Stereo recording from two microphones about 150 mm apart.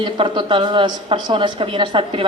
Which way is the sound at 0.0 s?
30° right (ahead or behind).